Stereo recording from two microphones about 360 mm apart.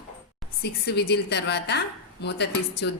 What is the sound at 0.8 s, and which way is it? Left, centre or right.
A woman's voice, left.